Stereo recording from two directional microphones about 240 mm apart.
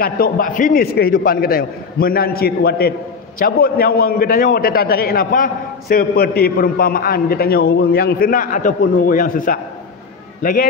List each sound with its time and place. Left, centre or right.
0.0 s a man's voice: left